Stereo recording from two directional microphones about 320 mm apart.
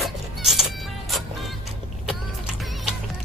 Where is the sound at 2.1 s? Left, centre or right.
Centre.